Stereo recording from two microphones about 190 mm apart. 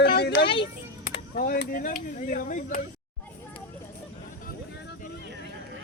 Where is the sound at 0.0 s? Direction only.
60° left (ahead or behind).